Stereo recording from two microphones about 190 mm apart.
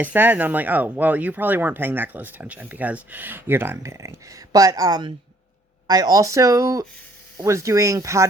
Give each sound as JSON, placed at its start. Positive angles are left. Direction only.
{"t": 0.0, "sound": "speech", "side_deg": -10}